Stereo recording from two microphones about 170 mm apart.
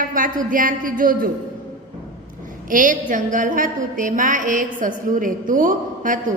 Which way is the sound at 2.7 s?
50° right (ahead or behind).